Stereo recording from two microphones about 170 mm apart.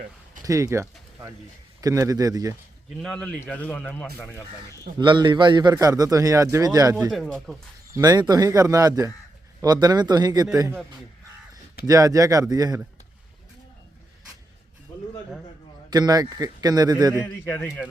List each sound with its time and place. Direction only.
0.4 s a man's voice: 20° right (ahead or behind)
3.0 s speech: 5° left (ahead or behind)
4.9 s a man's voice: 25° right (ahead or behind)
7.1 s speech: centre (ahead or behind)
7.9 s a man's voice: 20° right (ahead or behind)
11.9 s a man's voice: 20° right (ahead or behind)
15.9 s a man's voice: 20° right (ahead or behind)
17.2 s speech: 10° left (ahead or behind)